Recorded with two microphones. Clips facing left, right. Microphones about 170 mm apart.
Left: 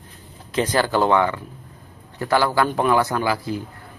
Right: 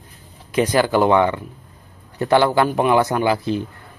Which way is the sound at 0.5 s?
15° right (ahead or behind).